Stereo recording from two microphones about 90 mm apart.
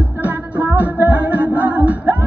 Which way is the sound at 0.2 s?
15° right (ahead or behind).